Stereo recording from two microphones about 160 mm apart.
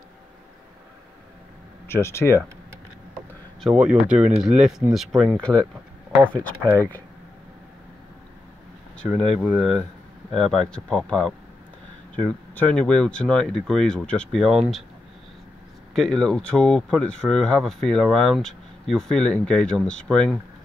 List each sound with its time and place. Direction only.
1.9 s speech: 15° left (ahead or behind)
3.6 s speech: 5° right (ahead or behind); by 7.0 s 10° left (ahead or behind)
8.9 s speech: 5° left (ahead or behind)
12.5 s speech: 5° left (ahead or behind)
15.9 s speech: 5° left (ahead or behind)